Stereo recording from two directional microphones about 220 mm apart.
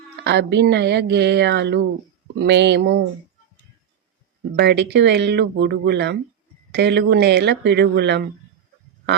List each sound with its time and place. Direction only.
0.3 s speech: 50° right (ahead or behind)
4.5 s speech: 50° right (ahead or behind)